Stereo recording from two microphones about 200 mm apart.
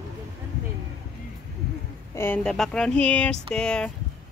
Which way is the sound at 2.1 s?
10° left (ahead or behind).